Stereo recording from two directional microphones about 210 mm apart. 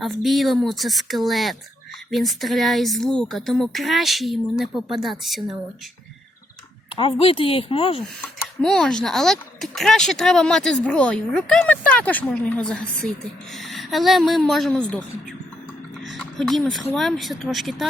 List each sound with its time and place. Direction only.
0.0 s speech: centre (ahead or behind)
6.9 s speech: 25° left (ahead or behind)
8.6 s speech: 5° left (ahead or behind)
16.0 s speech: centre (ahead or behind)